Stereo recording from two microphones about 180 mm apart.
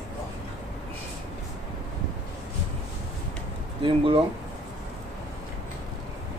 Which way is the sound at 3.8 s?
30° right (ahead or behind).